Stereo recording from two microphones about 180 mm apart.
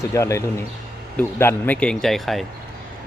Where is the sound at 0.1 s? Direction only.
15° left (ahead or behind).